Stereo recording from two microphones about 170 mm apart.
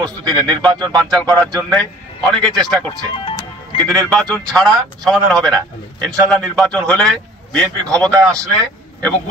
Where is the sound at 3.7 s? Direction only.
30° left (ahead or behind).